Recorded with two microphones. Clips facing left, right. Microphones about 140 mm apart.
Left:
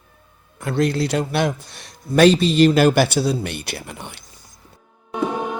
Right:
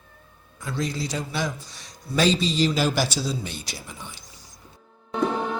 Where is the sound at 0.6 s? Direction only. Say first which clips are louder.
Left 9 dB; 65° left (ahead or behind).